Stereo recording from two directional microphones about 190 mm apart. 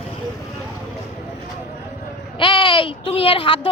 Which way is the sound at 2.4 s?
25° left (ahead or behind).